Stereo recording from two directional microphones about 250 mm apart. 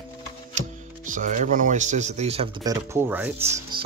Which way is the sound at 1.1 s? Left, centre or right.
Right.